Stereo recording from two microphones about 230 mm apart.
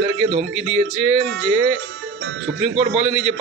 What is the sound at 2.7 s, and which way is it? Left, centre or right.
Speech, right.